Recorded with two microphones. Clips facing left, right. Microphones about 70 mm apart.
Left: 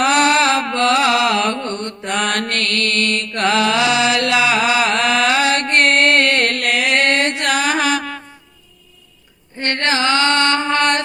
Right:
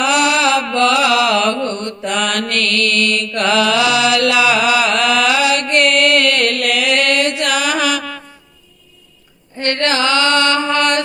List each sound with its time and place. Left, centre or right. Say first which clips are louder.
0.0 s mantra: even; left
9.6 s mantra: right 2 dB; left